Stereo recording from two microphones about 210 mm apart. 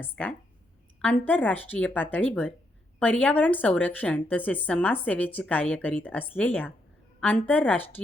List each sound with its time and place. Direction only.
0.0 s a woman's voice: 5° left (ahead or behind)